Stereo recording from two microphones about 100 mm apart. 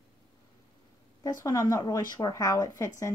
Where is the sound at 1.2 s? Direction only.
35° left (ahead or behind).